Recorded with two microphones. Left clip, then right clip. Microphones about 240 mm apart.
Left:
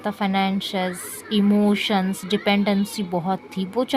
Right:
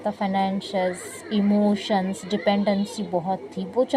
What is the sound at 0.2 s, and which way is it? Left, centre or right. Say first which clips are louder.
Speech: left 5 dB; left.